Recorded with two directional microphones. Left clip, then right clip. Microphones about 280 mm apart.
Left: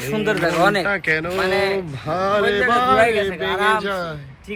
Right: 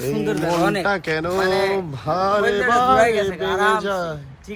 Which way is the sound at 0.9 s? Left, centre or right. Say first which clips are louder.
Left 1 dB; centre.